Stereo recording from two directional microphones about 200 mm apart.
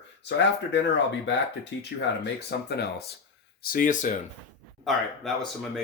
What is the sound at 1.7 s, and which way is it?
Speech, 65° left (ahead or behind).